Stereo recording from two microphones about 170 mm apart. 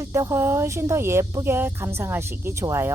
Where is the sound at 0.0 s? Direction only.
20° right (ahead or behind).